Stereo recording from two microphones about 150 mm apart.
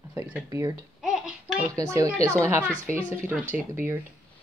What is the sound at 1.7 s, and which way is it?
Speech, 20° right (ahead or behind).